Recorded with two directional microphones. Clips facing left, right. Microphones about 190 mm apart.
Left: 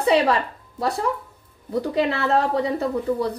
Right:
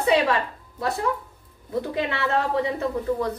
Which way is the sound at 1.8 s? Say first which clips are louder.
Left 4 dB; 35° left (ahead or behind).